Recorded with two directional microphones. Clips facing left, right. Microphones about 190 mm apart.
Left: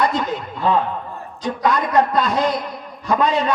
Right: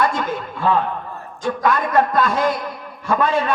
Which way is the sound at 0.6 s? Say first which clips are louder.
Even; 20° left (ahead or behind).